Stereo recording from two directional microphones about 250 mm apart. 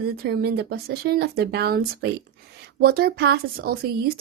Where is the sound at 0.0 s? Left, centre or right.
Right.